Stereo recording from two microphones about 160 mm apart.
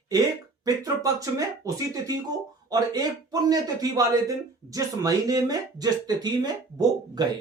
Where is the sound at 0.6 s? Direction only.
20° right (ahead or behind).